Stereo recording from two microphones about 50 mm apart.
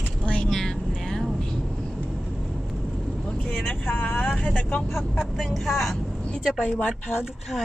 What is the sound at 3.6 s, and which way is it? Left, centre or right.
Speech, left.